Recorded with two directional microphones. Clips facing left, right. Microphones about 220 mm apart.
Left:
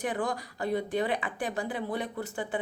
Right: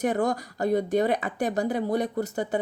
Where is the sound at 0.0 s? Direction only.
45° right (ahead or behind).